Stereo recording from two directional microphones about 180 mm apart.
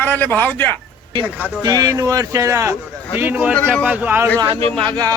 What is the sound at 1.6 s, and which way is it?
Speech, 20° right (ahead or behind).